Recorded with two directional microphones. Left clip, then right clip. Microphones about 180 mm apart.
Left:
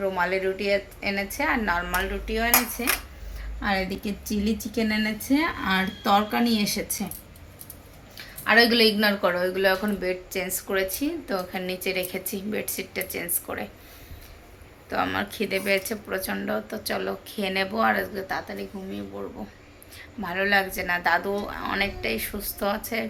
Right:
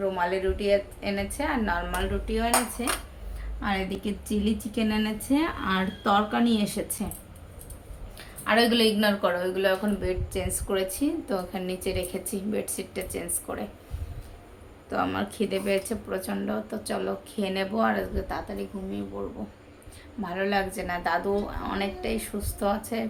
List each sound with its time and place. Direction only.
0.0 s a woman's voice: 15° left (ahead or behind)
3.6 s a woman's voice: 25° left (ahead or behind)
8.4 s a woman's voice: 15° left (ahead or behind)
10.3 s speech: centre (ahead or behind)
14.8 s speech: 10° right (ahead or behind)
20.2 s speech: 5° right (ahead or behind)